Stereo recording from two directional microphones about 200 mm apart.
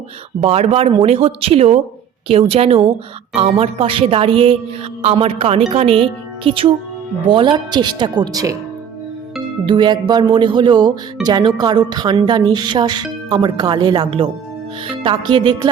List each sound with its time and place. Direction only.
0.3 s speech: 30° right (ahead or behind)
9.6 s speech: 25° right (ahead or behind)
15.3 s speech: 25° right (ahead or behind)